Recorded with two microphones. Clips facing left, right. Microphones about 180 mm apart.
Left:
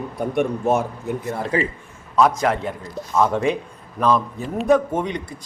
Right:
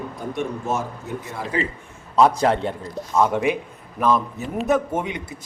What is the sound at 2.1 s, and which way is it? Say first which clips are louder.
Speech: right 1 dB; 30° right (ahead or behind).